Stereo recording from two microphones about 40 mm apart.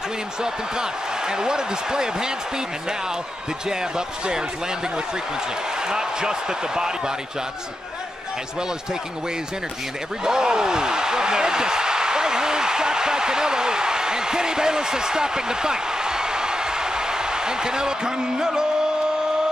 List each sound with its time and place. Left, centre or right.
0.4 s speech: centre
5.9 s speech: centre
10.2 s speech: centre